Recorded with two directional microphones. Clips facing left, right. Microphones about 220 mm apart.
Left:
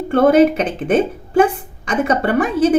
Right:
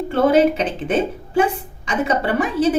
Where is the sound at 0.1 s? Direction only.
50° left (ahead or behind).